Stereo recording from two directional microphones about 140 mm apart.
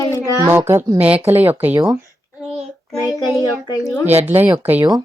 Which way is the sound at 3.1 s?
25° left (ahead or behind).